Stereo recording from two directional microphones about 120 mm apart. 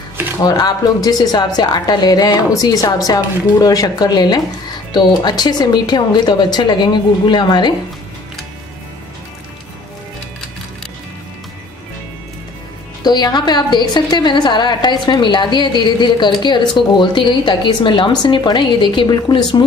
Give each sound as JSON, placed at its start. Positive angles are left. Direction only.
{"t": 0.4, "sound": "a woman's voice", "side_deg": 35}
{"t": 13.0, "sound": "a woman's voice", "side_deg": 35}